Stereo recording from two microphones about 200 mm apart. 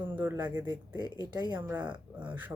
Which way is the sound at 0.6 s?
20° right (ahead or behind).